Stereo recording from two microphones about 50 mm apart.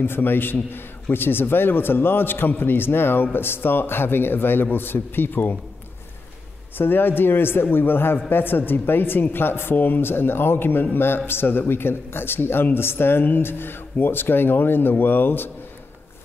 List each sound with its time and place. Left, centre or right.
0.0 s a man's voice: left
6.8 s a man's voice: left